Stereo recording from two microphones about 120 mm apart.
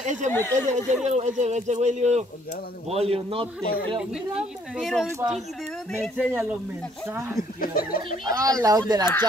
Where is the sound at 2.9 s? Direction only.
55° right (ahead or behind).